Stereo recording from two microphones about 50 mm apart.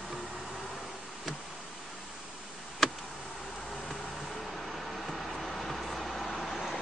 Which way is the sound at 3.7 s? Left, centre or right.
Centre.